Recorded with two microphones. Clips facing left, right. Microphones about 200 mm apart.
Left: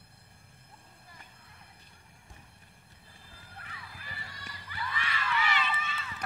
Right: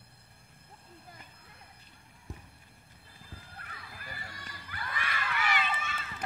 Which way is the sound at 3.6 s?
50° right (ahead or behind).